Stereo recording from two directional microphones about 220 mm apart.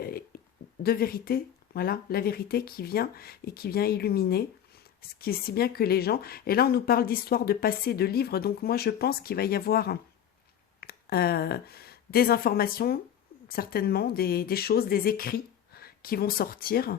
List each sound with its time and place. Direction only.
0.8 s speech: 45° left (ahead or behind)